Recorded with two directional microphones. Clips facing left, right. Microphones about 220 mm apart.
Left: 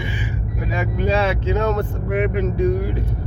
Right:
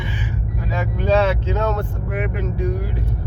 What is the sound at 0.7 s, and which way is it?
Speech, 10° left (ahead or behind).